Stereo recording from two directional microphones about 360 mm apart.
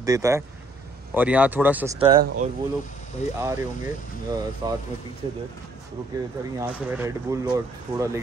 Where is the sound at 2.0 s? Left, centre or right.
Centre.